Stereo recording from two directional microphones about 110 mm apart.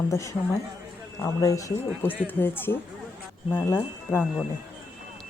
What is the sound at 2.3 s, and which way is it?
Speech, 20° left (ahead or behind).